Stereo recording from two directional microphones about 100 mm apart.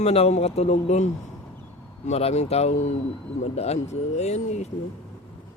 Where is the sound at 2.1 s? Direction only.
90° left.